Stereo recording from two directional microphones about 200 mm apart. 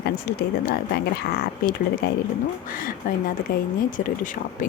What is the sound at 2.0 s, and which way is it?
Speech, 55° left (ahead or behind).